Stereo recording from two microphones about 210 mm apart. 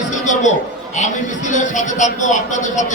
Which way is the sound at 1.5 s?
35° left (ahead or behind).